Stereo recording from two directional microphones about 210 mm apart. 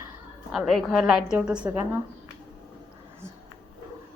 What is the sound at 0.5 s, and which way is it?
A woman's voice, centre (ahead or behind).